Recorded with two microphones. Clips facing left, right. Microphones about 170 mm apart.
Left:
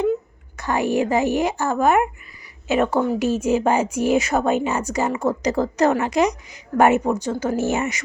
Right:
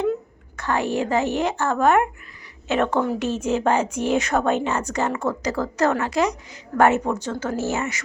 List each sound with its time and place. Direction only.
0.5 s speech: 10° left (ahead or behind)